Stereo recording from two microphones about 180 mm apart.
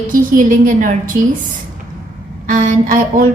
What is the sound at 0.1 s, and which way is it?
A woman's voice, 50° right (ahead or behind).